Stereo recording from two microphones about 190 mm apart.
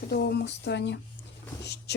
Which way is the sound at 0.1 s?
60° left (ahead or behind).